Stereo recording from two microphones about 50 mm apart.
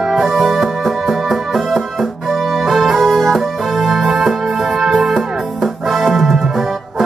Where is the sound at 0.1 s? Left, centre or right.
Centre.